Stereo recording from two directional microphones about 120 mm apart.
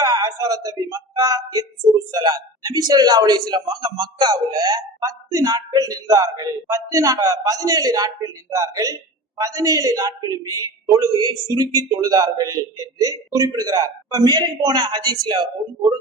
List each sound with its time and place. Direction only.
0.0 s a man's voice: 30° right (ahead or behind)